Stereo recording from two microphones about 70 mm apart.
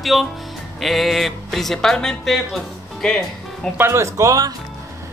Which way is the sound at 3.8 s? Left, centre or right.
Right.